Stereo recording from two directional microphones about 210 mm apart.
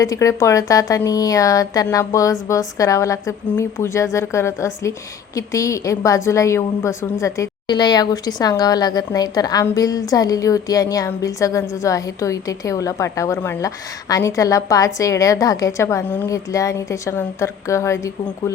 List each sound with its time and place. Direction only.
0.0 s speech: 15° left (ahead or behind)